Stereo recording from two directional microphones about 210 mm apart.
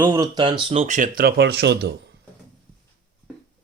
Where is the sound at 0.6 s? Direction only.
30° right (ahead or behind); by 2.1 s 55° right (ahead or behind).